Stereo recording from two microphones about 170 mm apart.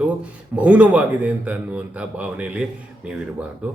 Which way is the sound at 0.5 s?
5° right (ahead or behind).